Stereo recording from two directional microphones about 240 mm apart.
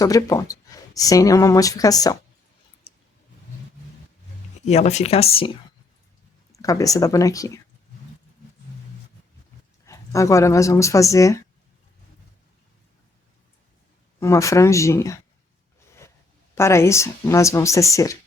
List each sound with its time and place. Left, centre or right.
0.0 s speech: centre
2.9 s a sound: left
4.6 s speech: left
6.5 s speech: centre
9.8 s speech: centre
14.2 s speech: centre
16.6 s speech: centre